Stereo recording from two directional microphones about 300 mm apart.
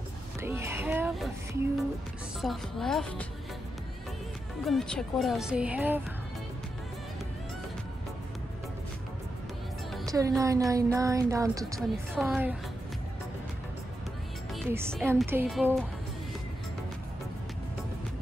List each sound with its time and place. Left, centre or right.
0.4 s speech: centre
4.6 s speech: centre
10.1 s speech: centre
14.5 s music: centre
14.9 s speech: centre